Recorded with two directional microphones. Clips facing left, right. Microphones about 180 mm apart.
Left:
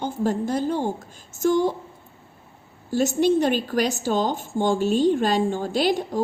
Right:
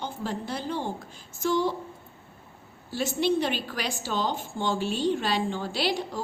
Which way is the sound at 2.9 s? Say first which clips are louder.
Left 6 dB; 45° left (ahead or behind).